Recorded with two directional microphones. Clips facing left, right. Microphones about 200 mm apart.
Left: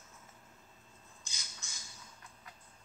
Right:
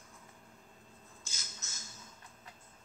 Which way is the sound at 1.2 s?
15° left (ahead or behind).